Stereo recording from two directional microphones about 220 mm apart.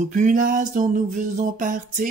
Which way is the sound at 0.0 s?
35° right (ahead or behind).